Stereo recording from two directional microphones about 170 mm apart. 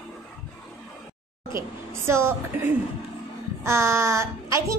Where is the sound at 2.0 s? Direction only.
15° right (ahead or behind).